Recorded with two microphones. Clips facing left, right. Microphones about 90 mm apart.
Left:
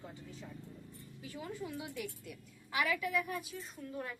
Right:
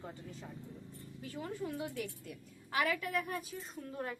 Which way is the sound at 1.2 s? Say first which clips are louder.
Right 2 dB; 45° right (ahead or behind).